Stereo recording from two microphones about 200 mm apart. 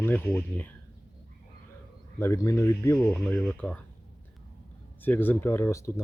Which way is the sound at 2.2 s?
15° left (ahead or behind).